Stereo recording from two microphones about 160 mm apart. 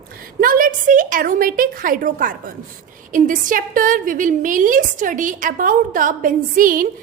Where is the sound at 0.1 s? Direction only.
65° right (ahead or behind).